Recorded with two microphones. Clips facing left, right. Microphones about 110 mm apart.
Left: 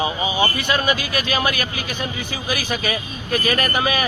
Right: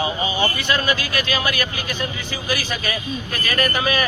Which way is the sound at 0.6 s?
20° left (ahead or behind).